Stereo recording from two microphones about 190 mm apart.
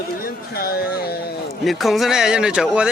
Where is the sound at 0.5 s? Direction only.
55° left (ahead or behind).